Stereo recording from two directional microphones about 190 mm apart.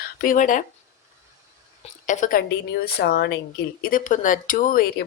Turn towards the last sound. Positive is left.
turn(degrees=50)  # may be behind; listen again after turning